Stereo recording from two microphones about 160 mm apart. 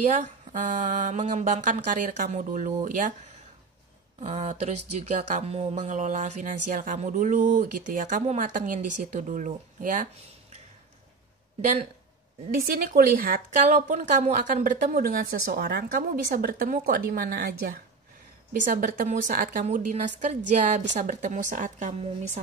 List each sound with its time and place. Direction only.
0.0 s speech: 50° right (ahead or behind)
4.2 s speech: 45° right (ahead or behind)
12.6 s speech: 70° right (ahead or behind)
13.7 s a woman's voice: 50° right (ahead or behind); by 17.7 s 70° right (ahead or behind)
18.6 s a woman's voice: 55° right (ahead or behind)